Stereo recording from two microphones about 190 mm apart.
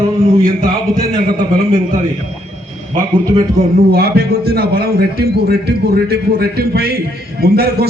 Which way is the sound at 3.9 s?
55° right (ahead or behind).